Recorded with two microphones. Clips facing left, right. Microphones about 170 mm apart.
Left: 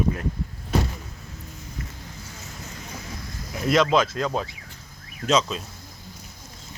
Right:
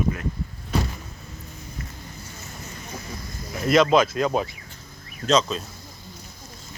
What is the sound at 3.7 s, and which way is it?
Speech, 5° right (ahead or behind).